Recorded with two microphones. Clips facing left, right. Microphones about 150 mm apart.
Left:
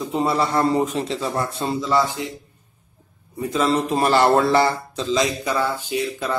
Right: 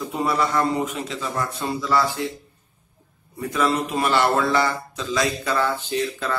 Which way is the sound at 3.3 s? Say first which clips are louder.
Left 2 dB; 20° left (ahead or behind).